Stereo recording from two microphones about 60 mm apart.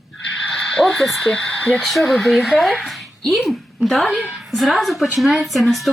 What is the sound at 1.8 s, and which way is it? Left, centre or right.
Speech, centre.